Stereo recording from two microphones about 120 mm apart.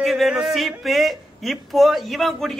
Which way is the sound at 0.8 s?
Centre (ahead or behind).